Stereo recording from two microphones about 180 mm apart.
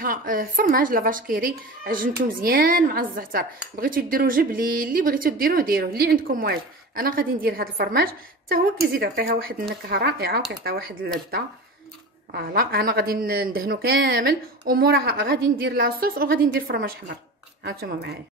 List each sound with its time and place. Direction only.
0.0 s a child's voice: 50° right (ahead or behind)
12.3 s speech: 55° right (ahead or behind)
17.6 s speech: 65° right (ahead or behind)